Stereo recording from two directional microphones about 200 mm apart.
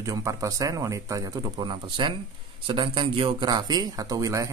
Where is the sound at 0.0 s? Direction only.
15° right (ahead or behind).